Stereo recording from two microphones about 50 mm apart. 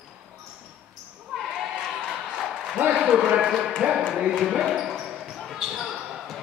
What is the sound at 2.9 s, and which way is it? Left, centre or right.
A man's voice, centre.